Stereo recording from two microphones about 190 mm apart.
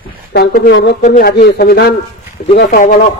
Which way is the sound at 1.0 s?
50° left (ahead or behind).